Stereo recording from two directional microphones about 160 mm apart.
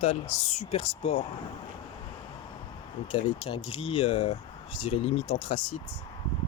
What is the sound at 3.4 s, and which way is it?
Speech, 35° left (ahead or behind).